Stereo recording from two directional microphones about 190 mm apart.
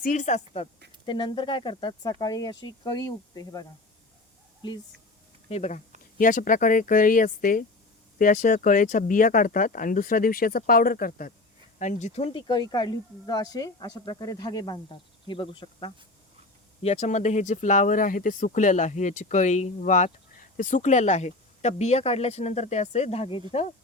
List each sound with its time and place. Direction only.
0.0 s speech: 40° left (ahead or behind)
1.0 s speech: 25° left (ahead or behind)
5.5 s speech: 35° left (ahead or behind)
11.8 s speech: 40° left (ahead or behind)